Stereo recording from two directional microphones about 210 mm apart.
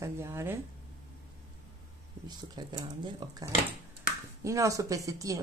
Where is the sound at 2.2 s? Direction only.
20° right (ahead or behind).